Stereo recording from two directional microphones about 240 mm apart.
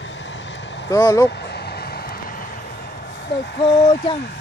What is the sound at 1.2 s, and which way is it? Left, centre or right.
Vehicle, left.